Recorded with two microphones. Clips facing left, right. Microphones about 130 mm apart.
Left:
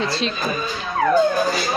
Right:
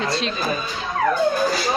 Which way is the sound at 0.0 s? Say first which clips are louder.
Left 1 dB; centre (ahead or behind).